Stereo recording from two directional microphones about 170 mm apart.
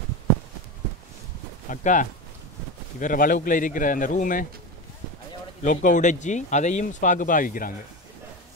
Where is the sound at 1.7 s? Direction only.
50° left (ahead or behind).